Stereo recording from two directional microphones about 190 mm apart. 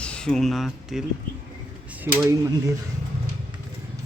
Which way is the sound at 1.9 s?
10° right (ahead or behind).